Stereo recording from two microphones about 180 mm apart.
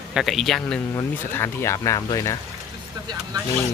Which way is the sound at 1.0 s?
15° left (ahead or behind).